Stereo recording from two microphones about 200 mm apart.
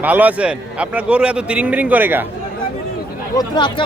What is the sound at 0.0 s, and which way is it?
A man's voice, 10° right (ahead or behind).